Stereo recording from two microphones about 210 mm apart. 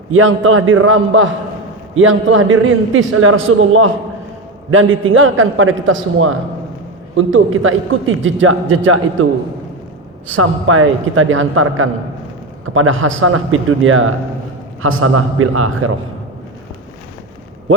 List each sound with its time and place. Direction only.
0.1 s a man's voice: 70° right (ahead or behind)
10.2 s a man's voice: 80° right